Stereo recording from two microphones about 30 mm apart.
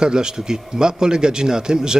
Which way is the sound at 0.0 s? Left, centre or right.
Right.